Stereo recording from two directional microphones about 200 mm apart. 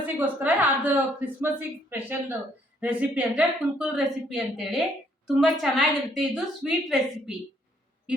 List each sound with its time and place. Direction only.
0.0 s a woman's voice: 10° right (ahead or behind)